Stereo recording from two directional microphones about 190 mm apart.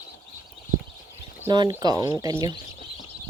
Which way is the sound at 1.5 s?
20° right (ahead or behind).